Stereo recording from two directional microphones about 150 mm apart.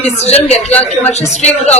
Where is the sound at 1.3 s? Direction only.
50° left (ahead or behind).